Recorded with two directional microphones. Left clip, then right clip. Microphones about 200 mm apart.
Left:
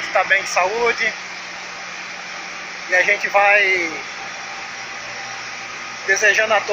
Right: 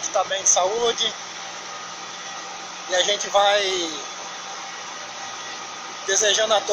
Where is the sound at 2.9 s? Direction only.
5° right (ahead or behind).